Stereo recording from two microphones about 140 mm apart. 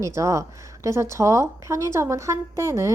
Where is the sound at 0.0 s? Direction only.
20° right (ahead or behind).